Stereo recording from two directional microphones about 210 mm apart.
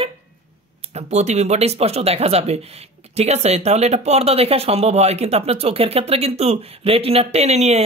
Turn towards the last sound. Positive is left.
turn(degrees=-30)  # may be behind; listen again after turning